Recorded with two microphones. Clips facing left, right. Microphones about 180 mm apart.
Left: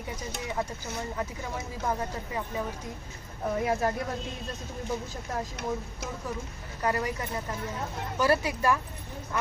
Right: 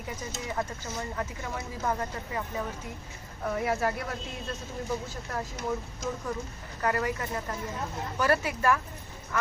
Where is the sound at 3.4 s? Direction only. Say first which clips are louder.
Left 1 dB; 15° left (ahead or behind).